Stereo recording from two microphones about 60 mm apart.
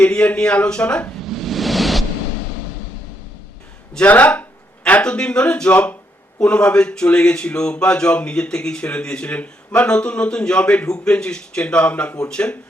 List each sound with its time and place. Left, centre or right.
0.0 s speech: centre
1.2 s a sound: centre
4.0 s speech: left